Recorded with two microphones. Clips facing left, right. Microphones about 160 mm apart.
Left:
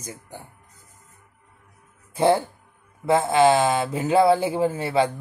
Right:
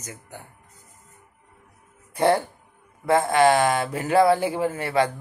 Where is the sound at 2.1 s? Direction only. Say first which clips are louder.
Left 1 dB; 25° left (ahead or behind).